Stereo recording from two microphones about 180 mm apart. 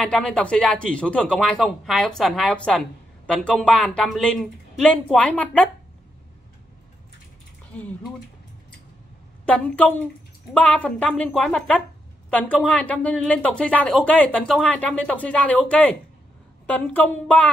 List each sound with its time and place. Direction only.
0.0 s speech: 5° left (ahead or behind)
9.5 s speech: 5° left (ahead or behind)